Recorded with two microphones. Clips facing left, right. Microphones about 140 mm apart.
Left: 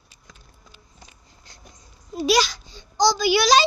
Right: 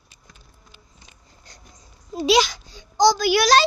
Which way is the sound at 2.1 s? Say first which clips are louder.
Right 2 dB; 25° right (ahead or behind).